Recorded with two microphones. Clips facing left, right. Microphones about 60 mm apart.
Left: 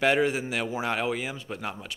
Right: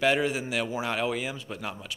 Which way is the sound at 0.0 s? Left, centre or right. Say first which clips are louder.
Left 2 dB; left.